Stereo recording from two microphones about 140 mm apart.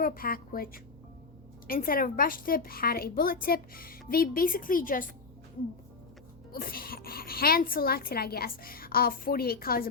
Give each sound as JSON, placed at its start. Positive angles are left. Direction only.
{"t": 0.0, "sound": "a woman's voice", "side_deg": 90}
{"t": 6.5, "sound": "speech", "side_deg": 90}